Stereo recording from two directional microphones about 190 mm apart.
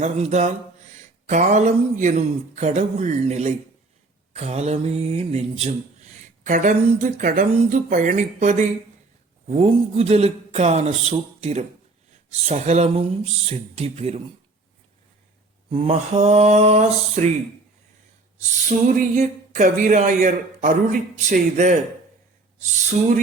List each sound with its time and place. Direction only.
0.0 s speech: 35° right (ahead or behind)
15.7 s speech: 35° right (ahead or behind)
18.6 s speech: 45° right (ahead or behind)